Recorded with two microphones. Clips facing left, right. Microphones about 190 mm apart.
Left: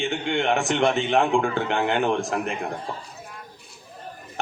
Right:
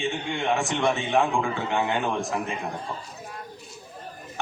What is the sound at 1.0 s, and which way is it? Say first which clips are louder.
Speech: left 3 dB; 60° left (ahead or behind).